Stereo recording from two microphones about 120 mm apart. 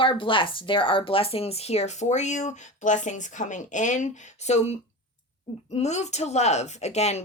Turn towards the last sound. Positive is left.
turn(degrees=65)  # may be behind; listen again after turning